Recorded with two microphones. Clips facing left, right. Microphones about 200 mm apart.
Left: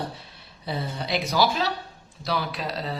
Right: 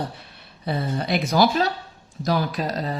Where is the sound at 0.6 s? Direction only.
55° right (ahead or behind).